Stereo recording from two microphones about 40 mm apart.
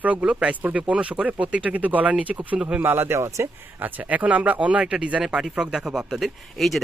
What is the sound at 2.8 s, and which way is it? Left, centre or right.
Speech, right.